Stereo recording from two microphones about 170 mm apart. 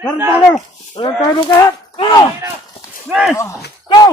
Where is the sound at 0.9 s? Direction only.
25° left (ahead or behind).